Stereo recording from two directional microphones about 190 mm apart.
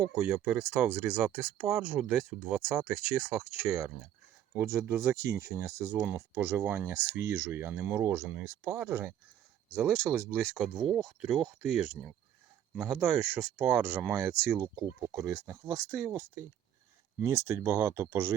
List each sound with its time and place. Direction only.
0.2 s speech: 10° right (ahead or behind)
4.5 s speech: 15° right (ahead or behind)
5.1 s speech: 55° right (ahead or behind)
5.4 s speech: 15° right (ahead or behind)